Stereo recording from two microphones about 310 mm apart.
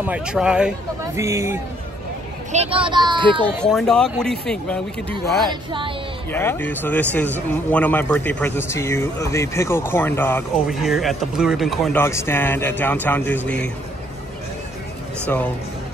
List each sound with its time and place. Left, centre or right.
0.0 s a child's voice: centre
3.6 s speech: centre
5.5 s a child's voice: centre
6.3 s speech: centre
15.2 s speech: centre